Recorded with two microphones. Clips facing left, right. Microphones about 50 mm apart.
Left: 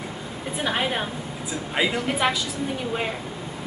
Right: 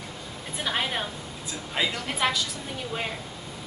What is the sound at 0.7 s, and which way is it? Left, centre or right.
A woman's voice, centre.